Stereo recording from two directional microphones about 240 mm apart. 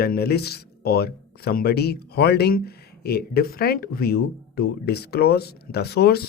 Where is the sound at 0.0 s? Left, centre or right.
Left.